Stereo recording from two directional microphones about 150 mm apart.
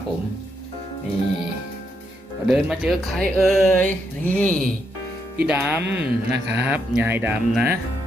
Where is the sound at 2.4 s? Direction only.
5° right (ahead or behind).